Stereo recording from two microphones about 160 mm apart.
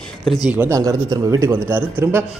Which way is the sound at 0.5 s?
15° right (ahead or behind).